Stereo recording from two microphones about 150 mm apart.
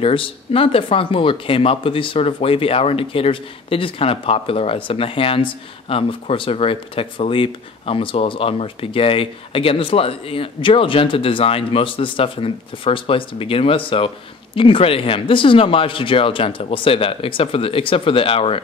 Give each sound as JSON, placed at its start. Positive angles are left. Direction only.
{"t": 0.0, "sound": "speech", "side_deg": 40}